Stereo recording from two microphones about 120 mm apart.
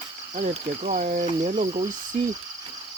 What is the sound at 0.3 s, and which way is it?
Speech, 80° right.